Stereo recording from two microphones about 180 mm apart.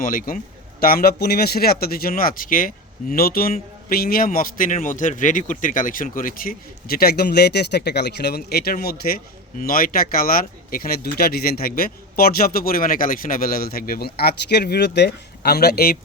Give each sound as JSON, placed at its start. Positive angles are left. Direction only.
{"t": 0.0, "sound": "a man's voice", "side_deg": 50}